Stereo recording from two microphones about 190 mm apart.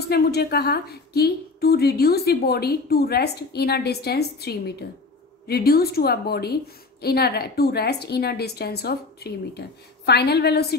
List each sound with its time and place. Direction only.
0.1 s a woman's voice: 55° left (ahead or behind)